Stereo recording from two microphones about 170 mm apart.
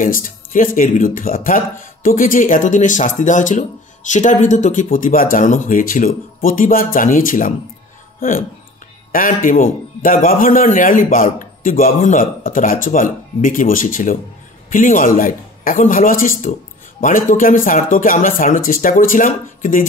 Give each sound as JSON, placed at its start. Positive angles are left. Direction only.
{"t": 0.0, "sound": "speech", "side_deg": 50}